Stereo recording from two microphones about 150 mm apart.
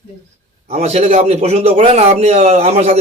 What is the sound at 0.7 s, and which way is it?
A man's voice, 45° right (ahead or behind).